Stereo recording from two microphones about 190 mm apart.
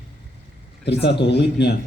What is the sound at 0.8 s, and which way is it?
Speech, 65° left (ahead or behind).